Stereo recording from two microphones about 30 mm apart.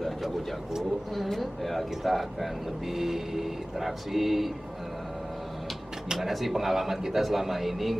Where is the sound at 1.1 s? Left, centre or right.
Centre.